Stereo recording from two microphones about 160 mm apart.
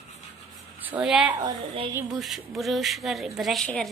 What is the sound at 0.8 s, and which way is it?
A woman's voice, 5° right (ahead or behind).